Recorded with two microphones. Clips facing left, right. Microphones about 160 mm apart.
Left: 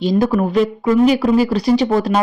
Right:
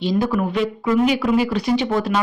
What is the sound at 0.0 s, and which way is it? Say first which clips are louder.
Speech: left 4 dB; 45° left (ahead or behind).